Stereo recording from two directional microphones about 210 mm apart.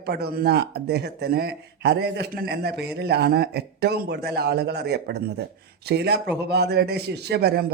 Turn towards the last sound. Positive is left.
turn(degrees=-50)  # may be behind; listen again after turning